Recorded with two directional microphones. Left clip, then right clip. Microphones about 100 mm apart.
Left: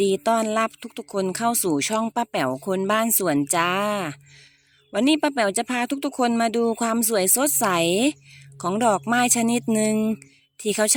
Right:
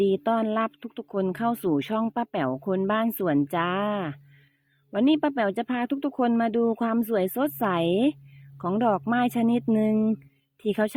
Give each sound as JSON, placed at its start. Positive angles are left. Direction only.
{"t": 0.0, "sound": "speech", "side_deg": 25}